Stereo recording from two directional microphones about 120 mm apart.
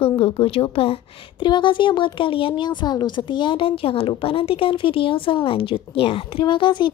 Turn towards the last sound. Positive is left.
turn(degrees=40)  # may be behind; listen again after turning